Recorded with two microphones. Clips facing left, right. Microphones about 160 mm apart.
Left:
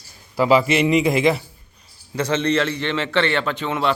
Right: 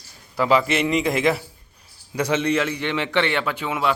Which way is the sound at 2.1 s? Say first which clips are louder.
Left 1 dB; 10° right (ahead or behind).